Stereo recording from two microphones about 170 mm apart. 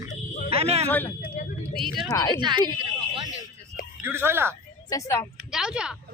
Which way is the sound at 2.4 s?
25° right (ahead or behind).